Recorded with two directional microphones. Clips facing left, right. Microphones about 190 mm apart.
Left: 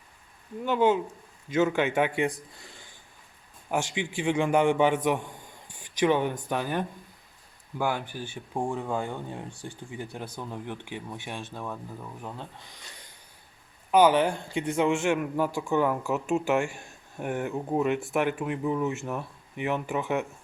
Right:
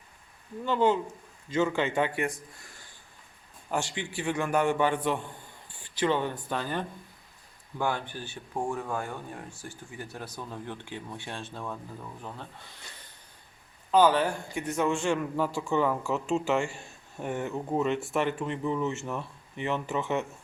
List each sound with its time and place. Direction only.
0.6 s speech: 10° left (ahead or behind)
3.7 s speech: 15° left (ahead or behind)